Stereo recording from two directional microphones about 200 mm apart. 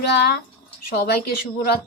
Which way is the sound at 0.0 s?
55° left (ahead or behind).